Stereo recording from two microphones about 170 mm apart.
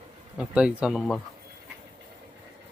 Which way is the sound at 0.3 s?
5° right (ahead or behind).